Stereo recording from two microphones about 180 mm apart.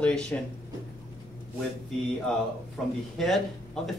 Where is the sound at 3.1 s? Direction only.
Centre (ahead or behind).